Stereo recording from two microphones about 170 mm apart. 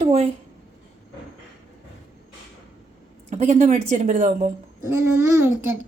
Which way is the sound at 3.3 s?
45° right (ahead or behind).